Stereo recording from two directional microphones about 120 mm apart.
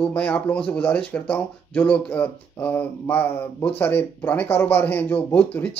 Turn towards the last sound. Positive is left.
turn(degrees=15)  # may be behind; listen again after turning